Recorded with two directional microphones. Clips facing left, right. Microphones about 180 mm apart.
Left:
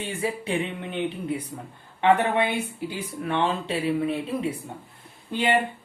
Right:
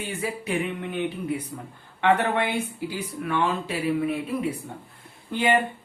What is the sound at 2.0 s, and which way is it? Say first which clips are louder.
Speech: left 1 dB; 15° left (ahead or behind).